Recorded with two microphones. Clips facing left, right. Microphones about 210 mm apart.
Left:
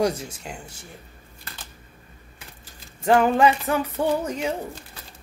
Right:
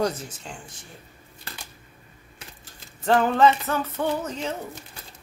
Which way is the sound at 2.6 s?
10° left (ahead or behind).